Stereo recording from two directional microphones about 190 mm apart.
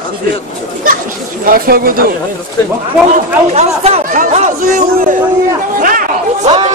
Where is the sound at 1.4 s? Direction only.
50° right (ahead or behind).